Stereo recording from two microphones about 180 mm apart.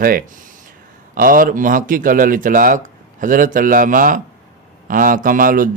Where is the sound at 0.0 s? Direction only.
55° right (ahead or behind).